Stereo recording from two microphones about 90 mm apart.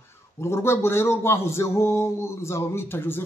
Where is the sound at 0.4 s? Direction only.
30° left (ahead or behind).